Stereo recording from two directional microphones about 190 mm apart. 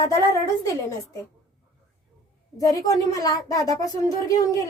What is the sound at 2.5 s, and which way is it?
Speech, 20° left (ahead or behind).